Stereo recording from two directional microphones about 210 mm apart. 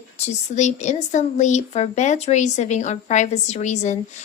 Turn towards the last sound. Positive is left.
turn(degrees=35)  # may be behind; listen again after turning